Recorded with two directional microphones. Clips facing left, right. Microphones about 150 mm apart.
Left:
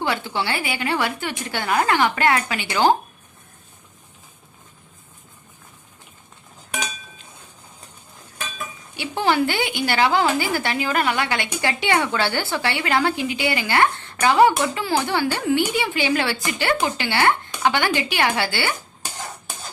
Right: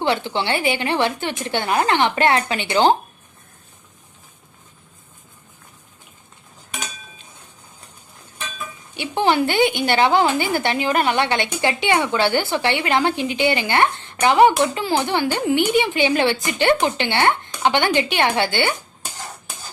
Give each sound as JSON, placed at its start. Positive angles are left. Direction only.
{"t": 0.0, "sound": "a woman's voice", "side_deg": -25}
{"t": 9.0, "sound": "a woman's voice", "side_deg": -20}